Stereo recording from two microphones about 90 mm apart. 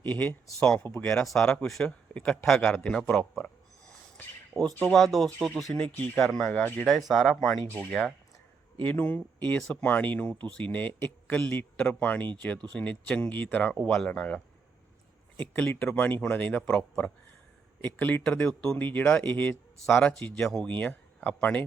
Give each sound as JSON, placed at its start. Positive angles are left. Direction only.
{"t": 0.0, "sound": "speech", "side_deg": 20}
{"t": 0.6, "sound": "a man's voice", "side_deg": 10}
{"t": 4.5, "sound": "a man's voice", "side_deg": 10}
{"t": 6.5, "sound": "a man's voice", "side_deg": 20}
{"t": 7.1, "sound": "speech", "side_deg": 0}
{"t": 7.7, "sound": "a man's voice", "side_deg": 15}